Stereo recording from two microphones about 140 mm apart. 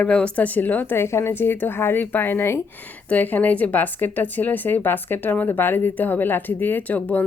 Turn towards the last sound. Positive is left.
turn(degrees=10)  # may be behind; listen again after turning